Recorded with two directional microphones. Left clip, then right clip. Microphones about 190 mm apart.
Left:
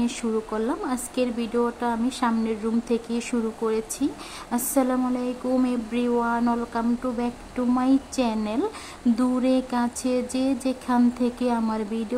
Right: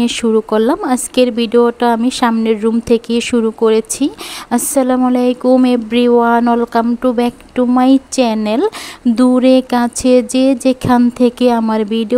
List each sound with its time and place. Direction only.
0.0 s speech: 40° right (ahead or behind)